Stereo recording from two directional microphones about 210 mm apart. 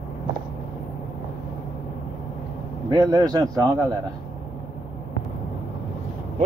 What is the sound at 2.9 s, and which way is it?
Speech, 20° right (ahead or behind).